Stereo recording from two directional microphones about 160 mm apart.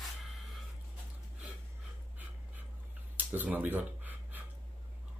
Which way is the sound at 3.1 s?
10° right (ahead or behind).